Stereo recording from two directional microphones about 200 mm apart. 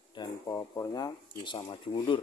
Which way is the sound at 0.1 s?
20° left (ahead or behind).